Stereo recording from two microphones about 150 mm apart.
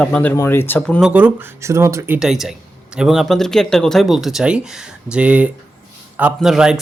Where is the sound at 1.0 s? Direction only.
10° right (ahead or behind).